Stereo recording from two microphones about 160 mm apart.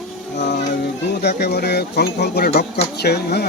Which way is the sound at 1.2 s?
90° left.